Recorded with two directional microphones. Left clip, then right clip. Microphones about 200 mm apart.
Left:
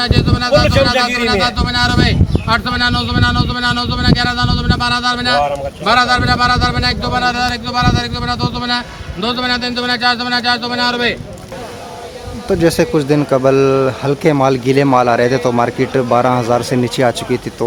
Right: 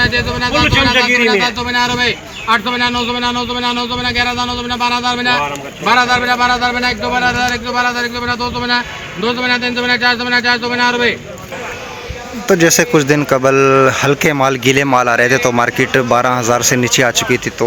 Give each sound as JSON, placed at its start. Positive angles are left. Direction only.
{"t": 0.0, "sound": "speech", "side_deg": 25}
{"t": 0.6, "sound": "speech", "side_deg": 55}
{"t": 1.5, "sound": "speech", "side_deg": 25}
{"t": 12.5, "sound": "speech", "side_deg": -5}